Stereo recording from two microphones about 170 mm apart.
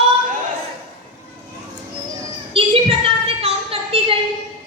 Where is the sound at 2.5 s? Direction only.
35° right (ahead or behind).